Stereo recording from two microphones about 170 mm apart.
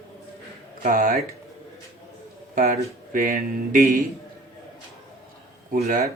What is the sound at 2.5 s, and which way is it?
Speech, 50° right (ahead or behind).